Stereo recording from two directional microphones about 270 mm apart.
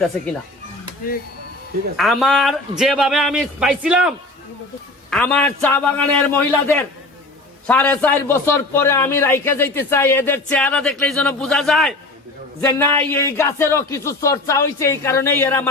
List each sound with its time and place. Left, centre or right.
2.0 s a man's voice: centre
5.1 s a man's voice: centre